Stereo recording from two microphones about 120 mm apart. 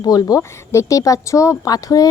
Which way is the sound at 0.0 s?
30° left (ahead or behind).